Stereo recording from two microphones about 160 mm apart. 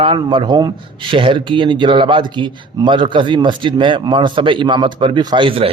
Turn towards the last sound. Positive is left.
turn(degrees=-35)  # may be behind; listen again after turning